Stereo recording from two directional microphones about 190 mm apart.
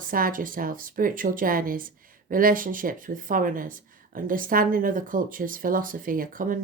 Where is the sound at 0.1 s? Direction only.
45° right (ahead or behind).